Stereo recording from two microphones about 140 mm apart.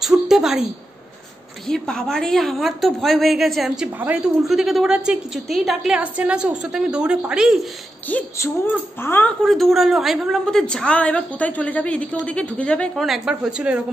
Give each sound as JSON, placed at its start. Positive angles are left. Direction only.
{"t": 0.0, "sound": "a sound", "side_deg": -5}
{"t": 1.7, "sound": "a woman's voice", "side_deg": 5}
{"t": 8.1, "sound": "a woman's voice", "side_deg": 10}
{"t": 9.4, "sound": "a woman's voice", "side_deg": 0}